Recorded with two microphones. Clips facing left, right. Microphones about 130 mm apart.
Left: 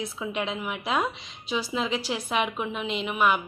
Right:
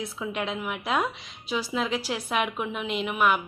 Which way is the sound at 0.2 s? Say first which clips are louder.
Even; centre (ahead or behind).